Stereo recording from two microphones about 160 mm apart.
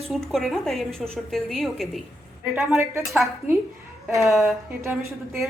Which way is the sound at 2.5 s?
15° right (ahead or behind).